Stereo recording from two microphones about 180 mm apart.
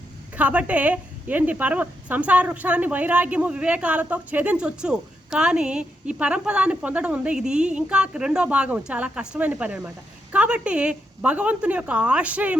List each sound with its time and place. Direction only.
0.3 s a woman's voice: 5° right (ahead or behind)